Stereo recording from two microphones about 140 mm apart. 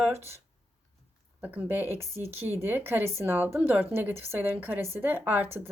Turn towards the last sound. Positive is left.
turn(degrees=-15)  # may be behind; listen again after turning